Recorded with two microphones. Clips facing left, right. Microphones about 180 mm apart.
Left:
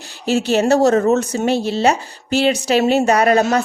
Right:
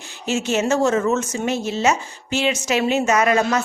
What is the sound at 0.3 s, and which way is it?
Speech, 35° left (ahead or behind).